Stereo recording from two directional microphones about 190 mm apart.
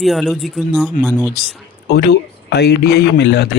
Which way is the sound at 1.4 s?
55° left (ahead or behind).